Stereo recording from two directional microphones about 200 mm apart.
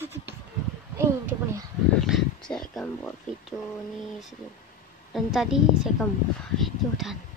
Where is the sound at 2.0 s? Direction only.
Centre (ahead or behind).